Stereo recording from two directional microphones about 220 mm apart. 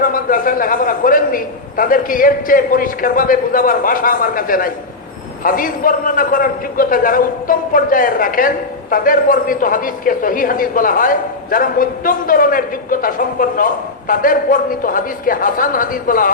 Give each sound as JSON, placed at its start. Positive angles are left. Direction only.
{"t": 0.0, "sound": "a man's voice", "side_deg": 40}